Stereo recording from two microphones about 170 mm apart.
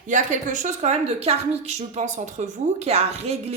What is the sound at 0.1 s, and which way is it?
A woman's voice, 45° right (ahead or behind).